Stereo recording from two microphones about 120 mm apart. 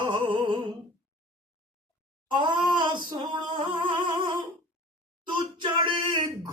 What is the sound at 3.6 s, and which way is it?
Humming, 45° right (ahead or behind).